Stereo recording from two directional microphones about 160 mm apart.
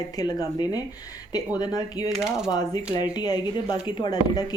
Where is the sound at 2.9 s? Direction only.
25° left (ahead or behind).